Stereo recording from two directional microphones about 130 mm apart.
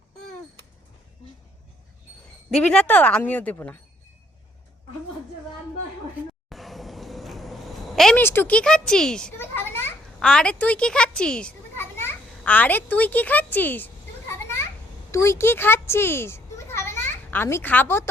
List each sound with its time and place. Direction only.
2.5 s speech: 5° left (ahead or behind)
6.5 s a sound: centre (ahead or behind)
8.1 s speech: 15° left (ahead or behind)
9.4 s children playing: 15° left (ahead or behind)
10.2 s children playing: 5° left (ahead or behind)
15.1 s a child's voice: 20° left (ahead or behind)